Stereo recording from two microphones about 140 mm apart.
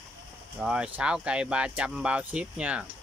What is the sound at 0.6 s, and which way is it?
Speech, 5° right (ahead or behind).